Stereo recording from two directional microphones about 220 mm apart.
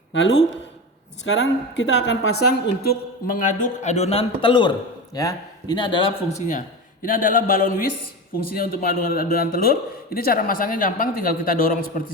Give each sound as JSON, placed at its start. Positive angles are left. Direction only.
{"t": 0.1, "sound": "speech", "side_deg": 55}
{"t": 2.3, "sound": "a woman's voice", "side_deg": 90}
{"t": 2.8, "sound": "a man's voice", "side_deg": 45}
{"t": 6.5, "sound": "a man's voice", "side_deg": 35}